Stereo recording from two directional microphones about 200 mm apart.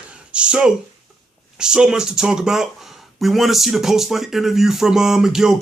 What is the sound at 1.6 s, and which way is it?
Speech, 5° right (ahead or behind).